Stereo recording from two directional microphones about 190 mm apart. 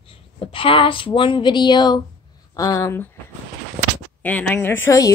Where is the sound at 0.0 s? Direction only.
30° left (ahead or behind); by 3.2 s 10° left (ahead or behind).